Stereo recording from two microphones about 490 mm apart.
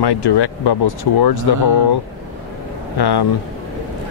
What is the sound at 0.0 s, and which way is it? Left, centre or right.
Speech, left.